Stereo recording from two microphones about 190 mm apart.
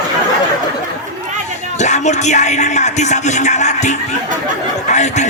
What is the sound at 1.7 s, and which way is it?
Speech, 40° left (ahead or behind).